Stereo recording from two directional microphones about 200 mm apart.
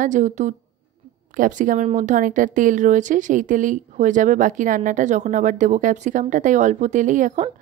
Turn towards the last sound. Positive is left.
turn(degrees=-40)  # may be behind; listen again after turning